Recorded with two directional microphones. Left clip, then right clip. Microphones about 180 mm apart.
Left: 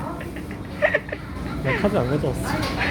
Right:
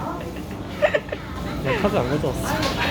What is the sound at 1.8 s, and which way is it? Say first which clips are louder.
Speech: even; 35° left (ahead or behind).